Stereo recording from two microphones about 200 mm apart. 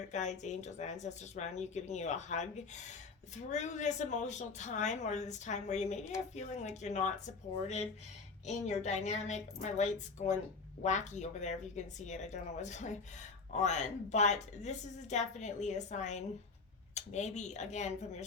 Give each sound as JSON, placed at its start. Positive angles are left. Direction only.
{"t": 0.1, "sound": "speech", "side_deg": 35}